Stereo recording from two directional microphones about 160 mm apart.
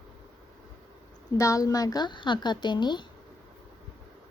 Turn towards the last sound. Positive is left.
turn(degrees=30)  # may be behind; listen again after turning